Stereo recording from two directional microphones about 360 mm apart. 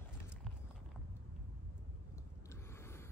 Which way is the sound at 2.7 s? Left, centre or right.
Centre.